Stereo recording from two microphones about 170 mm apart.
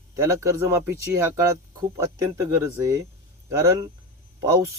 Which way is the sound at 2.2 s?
20° right (ahead or behind).